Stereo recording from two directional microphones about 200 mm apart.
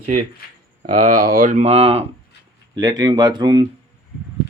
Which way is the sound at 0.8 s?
40° right (ahead or behind).